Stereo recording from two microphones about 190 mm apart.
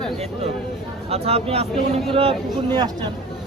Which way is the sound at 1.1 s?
30° right (ahead or behind).